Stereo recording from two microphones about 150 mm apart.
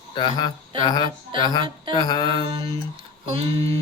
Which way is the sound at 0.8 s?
25° left (ahead or behind).